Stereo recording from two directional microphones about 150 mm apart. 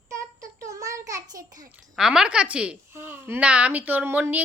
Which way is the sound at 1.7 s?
5° right (ahead or behind).